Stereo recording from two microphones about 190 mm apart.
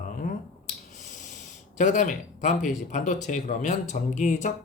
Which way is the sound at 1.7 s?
40° left (ahead or behind).